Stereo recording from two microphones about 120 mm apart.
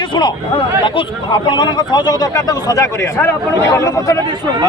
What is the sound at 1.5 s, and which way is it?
Speech, 35° left (ahead or behind).